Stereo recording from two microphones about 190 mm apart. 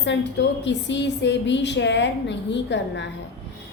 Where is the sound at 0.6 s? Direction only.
70° left (ahead or behind).